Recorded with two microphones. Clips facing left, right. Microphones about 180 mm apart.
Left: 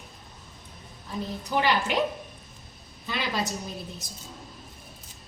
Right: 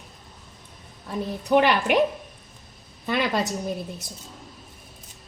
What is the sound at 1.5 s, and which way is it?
Speech, 60° right (ahead or behind).